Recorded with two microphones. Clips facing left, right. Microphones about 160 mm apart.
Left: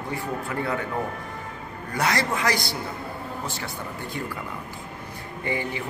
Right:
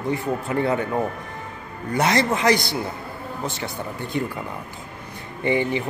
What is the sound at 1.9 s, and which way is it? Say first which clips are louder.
Speech: right 5 dB; 20° right (ahead or behind).